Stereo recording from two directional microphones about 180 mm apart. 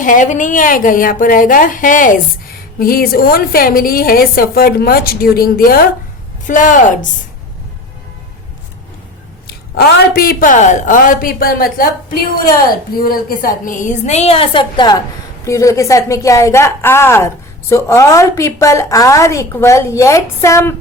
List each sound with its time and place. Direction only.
0.0 s a woman's voice: 45° left (ahead or behind)
9.5 s a woman's voice: 60° left (ahead or behind); by 20.7 s 15° left (ahead or behind)